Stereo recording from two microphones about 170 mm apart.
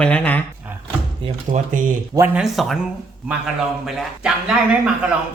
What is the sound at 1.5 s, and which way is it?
Speech, 50° right (ahead or behind).